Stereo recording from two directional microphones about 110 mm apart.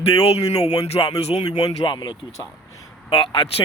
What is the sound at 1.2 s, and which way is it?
Speech, 90° left.